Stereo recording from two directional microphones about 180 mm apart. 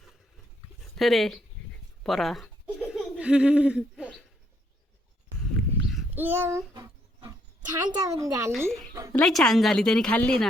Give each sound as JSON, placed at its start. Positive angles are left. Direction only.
{"t": 0.9, "sound": "speech", "side_deg": 0}
{"t": 2.0, "sound": "a sound", "side_deg": 0}
{"t": 6.1, "sound": "child singing", "side_deg": -10}
{"t": 7.9, "sound": "speech", "side_deg": -20}
{"t": 8.5, "sound": "a woman's voice", "side_deg": 0}
{"t": 8.9, "sound": "a woman's voice", "side_deg": -20}
{"t": 9.1, "sound": "a woman's voice", "side_deg": 5}